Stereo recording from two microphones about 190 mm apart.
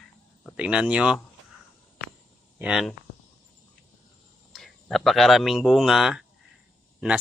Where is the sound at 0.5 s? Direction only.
5° right (ahead or behind).